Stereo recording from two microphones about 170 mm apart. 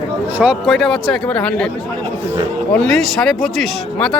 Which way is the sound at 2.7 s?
5° left (ahead or behind).